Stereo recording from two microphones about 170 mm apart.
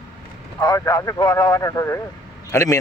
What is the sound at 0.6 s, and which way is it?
A man's voice, 20° left (ahead or behind).